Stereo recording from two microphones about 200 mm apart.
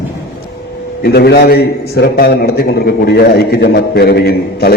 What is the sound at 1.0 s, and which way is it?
A man's voice, 55° left (ahead or behind).